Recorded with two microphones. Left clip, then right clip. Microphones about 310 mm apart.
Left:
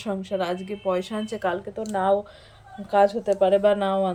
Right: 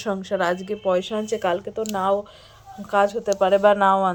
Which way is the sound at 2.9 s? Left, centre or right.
Centre.